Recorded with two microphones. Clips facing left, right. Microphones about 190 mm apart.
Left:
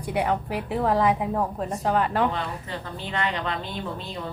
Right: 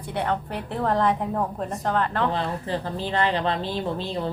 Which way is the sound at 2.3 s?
30° right (ahead or behind).